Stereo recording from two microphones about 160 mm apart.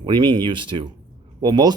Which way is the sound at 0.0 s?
30° right (ahead or behind).